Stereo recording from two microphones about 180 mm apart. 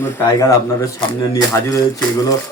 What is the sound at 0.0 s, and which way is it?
Speech, 15° left (ahead or behind).